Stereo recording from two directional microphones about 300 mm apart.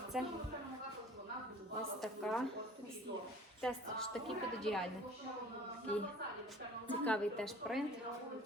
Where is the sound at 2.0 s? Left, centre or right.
Centre.